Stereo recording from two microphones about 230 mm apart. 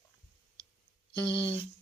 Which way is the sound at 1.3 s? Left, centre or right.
Left.